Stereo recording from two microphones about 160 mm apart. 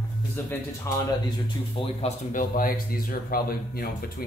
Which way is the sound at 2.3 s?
60° left (ahead or behind).